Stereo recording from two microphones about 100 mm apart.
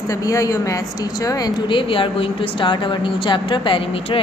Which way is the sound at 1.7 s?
60° left (ahead or behind).